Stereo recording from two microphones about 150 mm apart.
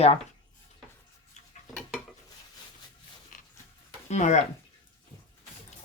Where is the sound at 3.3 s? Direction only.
60° left (ahead or behind).